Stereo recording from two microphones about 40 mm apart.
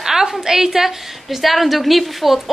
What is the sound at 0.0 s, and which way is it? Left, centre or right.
A woman's voice, centre.